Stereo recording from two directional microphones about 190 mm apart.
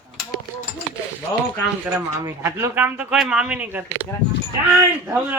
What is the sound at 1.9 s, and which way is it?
Speech, 10° right (ahead or behind).